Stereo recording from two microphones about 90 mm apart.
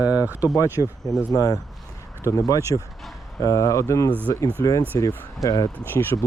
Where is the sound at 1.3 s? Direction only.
40° left (ahead or behind).